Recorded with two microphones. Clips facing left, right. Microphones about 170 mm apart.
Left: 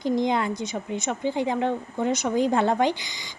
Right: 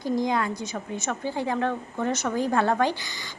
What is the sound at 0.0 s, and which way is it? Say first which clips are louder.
A woman's voice: left 2 dB; 25° left (ahead or behind).